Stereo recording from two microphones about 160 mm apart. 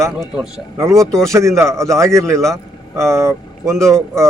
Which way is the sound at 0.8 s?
20° right (ahead or behind).